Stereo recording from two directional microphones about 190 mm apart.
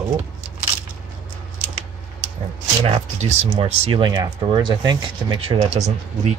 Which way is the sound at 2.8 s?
35° right (ahead or behind).